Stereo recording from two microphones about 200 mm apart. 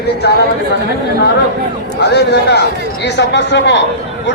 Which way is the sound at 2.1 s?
55° left (ahead or behind).